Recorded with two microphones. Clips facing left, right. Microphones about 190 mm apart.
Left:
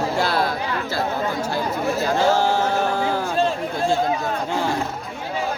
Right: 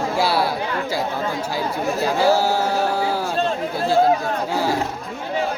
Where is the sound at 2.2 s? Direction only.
10° right (ahead or behind).